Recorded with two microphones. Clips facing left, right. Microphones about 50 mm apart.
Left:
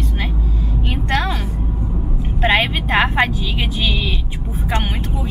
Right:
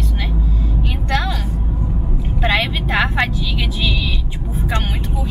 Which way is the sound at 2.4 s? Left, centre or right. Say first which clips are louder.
Left 2 dB; left.